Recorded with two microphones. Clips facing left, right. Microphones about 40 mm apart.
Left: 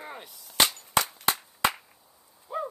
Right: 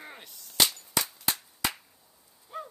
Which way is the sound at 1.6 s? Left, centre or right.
Left.